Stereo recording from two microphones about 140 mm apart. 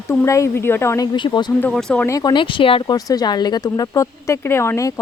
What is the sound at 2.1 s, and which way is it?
Speech, 25° left (ahead or behind).